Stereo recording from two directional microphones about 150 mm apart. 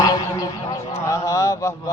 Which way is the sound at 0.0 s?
25° left (ahead or behind).